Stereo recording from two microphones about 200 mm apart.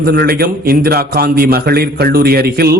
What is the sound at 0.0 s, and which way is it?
A man's voice, 50° right (ahead or behind).